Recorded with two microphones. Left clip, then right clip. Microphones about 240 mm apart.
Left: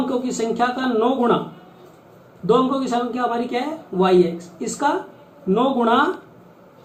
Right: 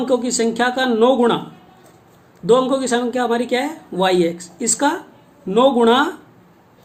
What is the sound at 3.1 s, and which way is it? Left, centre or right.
Speech, right.